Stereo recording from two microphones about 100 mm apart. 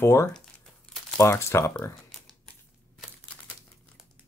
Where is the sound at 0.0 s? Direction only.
30° left (ahead or behind).